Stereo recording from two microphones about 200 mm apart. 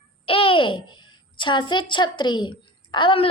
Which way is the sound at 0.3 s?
25° left (ahead or behind).